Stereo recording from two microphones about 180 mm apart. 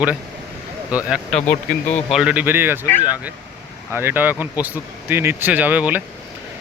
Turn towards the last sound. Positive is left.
turn(degrees=-10)  # may be behind; listen again after turning